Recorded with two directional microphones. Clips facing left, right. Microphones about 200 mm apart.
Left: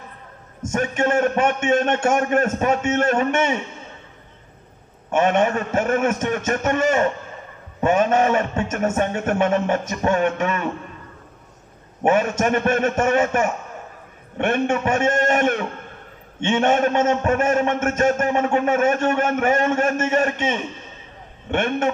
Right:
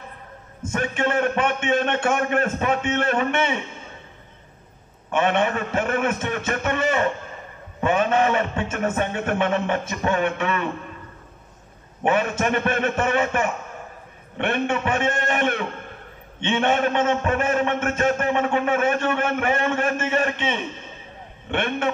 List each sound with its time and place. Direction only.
0.6 s a man's voice: 45° left (ahead or behind)
5.1 s a man's voice: 45° left (ahead or behind)
12.0 s a man's voice: 45° left (ahead or behind)